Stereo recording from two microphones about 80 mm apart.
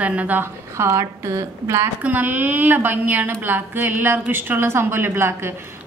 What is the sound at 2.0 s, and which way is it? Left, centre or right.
A woman's voice, right.